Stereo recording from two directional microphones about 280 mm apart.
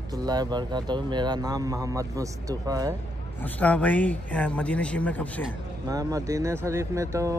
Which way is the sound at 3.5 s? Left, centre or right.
Centre.